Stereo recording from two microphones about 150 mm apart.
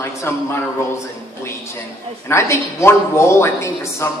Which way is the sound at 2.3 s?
20° left (ahead or behind).